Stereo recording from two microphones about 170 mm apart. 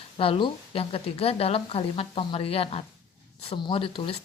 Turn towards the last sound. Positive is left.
turn(degrees=35)  # may be behind; listen again after turning